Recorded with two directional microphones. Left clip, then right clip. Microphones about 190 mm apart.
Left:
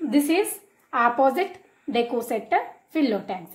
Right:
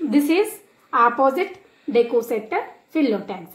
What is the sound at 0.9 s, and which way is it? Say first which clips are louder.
A woman's voice: right 3 dB; 25° left (ahead or behind).